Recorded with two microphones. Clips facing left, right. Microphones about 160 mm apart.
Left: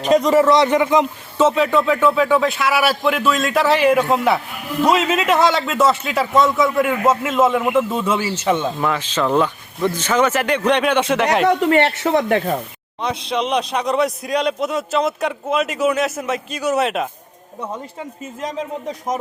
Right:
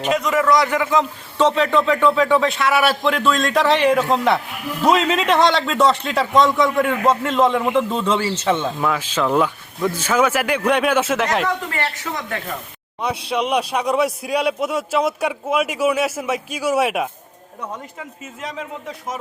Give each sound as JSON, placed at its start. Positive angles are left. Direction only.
{"t": 0.0, "sound": "a man's voice", "side_deg": 35}
{"t": 1.4, "sound": "a man's voice", "side_deg": 5}
{"t": 8.8, "sound": "a man's voice", "side_deg": -5}
{"t": 12.1, "sound": "speech", "side_deg": 60}
{"t": 13.0, "sound": "a man's voice", "side_deg": -10}
{"t": 17.6, "sound": "a man's voice", "side_deg": 35}